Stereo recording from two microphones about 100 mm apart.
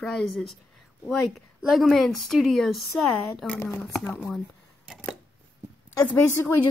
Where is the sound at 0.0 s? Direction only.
5° left (ahead or behind).